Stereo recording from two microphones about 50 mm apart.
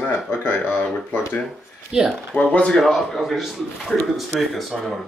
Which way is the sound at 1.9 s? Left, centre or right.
Centre.